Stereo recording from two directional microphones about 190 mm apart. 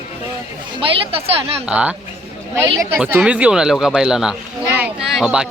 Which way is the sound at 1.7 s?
5° right (ahead or behind).